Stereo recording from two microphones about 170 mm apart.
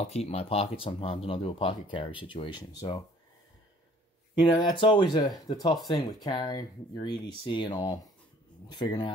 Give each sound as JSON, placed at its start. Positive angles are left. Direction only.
{"t": 0.0, "sound": "speech", "side_deg": 35}
{"t": 4.4, "sound": "speech", "side_deg": 25}